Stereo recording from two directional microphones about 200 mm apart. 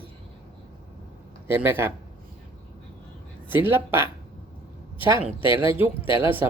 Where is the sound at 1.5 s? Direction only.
10° right (ahead or behind).